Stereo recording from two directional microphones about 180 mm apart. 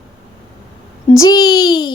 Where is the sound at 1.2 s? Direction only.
20° left (ahead or behind).